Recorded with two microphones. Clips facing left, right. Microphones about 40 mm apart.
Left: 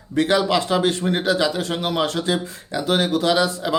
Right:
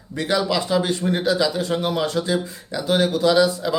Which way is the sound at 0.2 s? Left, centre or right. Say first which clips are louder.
Left 3 dB; left.